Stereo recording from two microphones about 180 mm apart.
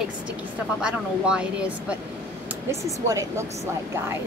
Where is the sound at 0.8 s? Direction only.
5° right (ahead or behind).